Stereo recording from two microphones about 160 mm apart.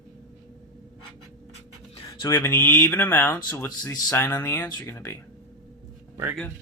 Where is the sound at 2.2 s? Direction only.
15° left (ahead or behind).